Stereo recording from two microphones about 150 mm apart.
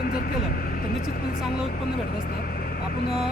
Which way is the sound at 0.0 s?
85° left.